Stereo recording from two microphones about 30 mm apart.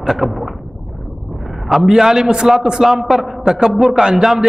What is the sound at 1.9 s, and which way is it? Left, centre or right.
Speech, centre.